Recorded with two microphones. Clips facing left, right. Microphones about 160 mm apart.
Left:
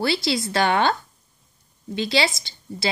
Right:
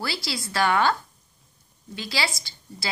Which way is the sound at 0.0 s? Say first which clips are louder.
Left 8 dB; 25° left (ahead or behind).